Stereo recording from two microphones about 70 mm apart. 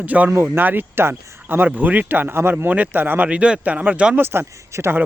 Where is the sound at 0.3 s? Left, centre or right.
Right.